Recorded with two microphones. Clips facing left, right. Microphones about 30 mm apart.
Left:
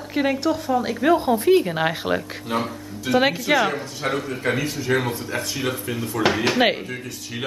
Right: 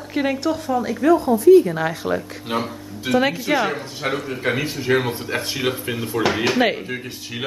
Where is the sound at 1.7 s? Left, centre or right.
Left.